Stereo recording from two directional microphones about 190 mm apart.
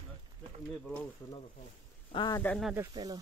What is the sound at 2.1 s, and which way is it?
Speech, 25° left (ahead or behind).